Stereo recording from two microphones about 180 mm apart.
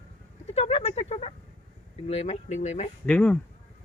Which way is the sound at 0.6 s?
35° left (ahead or behind).